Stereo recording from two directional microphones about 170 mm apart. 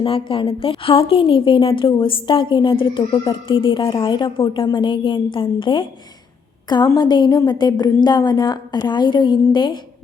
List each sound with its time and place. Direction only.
0.0 s a woman's voice: 30° left (ahead or behind)